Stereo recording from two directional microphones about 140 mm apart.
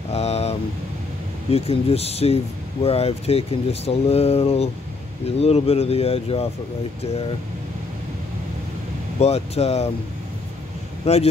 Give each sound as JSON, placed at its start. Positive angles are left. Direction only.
{"t": 0.1, "sound": "a sound", "side_deg": 50}
{"t": 1.5, "sound": "speech", "side_deg": 45}
{"t": 9.2, "sound": "speech", "side_deg": 50}
{"t": 11.1, "sound": "speech", "side_deg": 45}